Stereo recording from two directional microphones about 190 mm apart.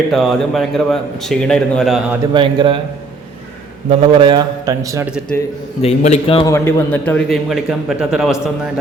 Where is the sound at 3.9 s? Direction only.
25° right (ahead or behind).